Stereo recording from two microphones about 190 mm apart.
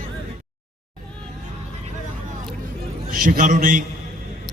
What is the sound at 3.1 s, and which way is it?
Speech, 50° right (ahead or behind).